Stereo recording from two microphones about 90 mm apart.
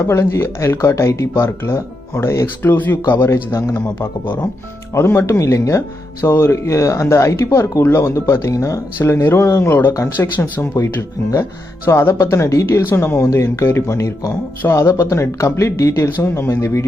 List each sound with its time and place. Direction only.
0.0 s speech: 30° left (ahead or behind)
4.9 s speech: 30° left (ahead or behind)
11.9 s speech: 30° left (ahead or behind)